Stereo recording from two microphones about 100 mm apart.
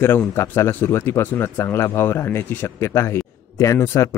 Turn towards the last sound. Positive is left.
turn(degrees=30)  # may be behind; listen again after turning